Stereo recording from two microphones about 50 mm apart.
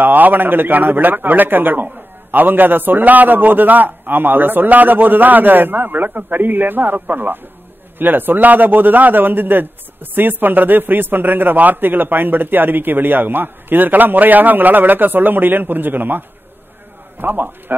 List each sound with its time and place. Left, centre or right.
0.0 s a man's voice: right